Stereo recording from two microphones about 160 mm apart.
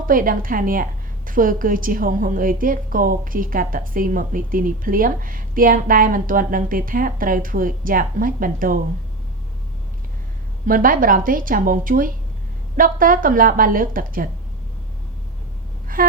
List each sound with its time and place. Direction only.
0.0 s a woman's voice: 60° right (ahead or behind)
10.7 s a woman's voice: 60° right (ahead or behind)
16.0 s gasp: 65° right (ahead or behind)